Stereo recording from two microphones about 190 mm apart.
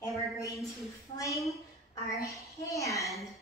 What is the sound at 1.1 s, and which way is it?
A woman's voice, 15° left (ahead or behind).